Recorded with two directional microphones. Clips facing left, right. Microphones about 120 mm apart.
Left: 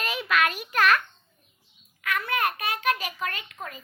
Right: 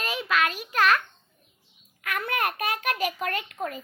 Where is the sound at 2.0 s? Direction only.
50° right (ahead or behind).